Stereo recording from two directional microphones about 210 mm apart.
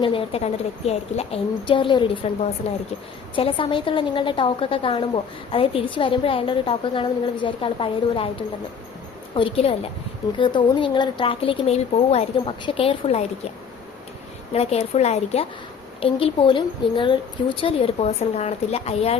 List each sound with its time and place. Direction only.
0.0 s a woman's voice: 25° left (ahead or behind)
9.3 s a woman's voice: 25° left (ahead or behind)
14.5 s a woman's voice: 30° left (ahead or behind)